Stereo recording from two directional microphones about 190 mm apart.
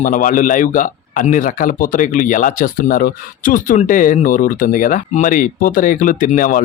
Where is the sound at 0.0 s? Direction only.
45° left (ahead or behind).